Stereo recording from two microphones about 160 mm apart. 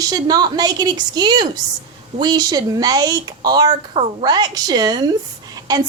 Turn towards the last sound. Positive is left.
turn(degrees=-25)  # may be behind; listen again after turning